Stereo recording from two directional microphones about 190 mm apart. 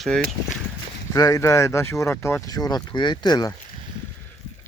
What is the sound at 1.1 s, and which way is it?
Speech, 15° left (ahead or behind).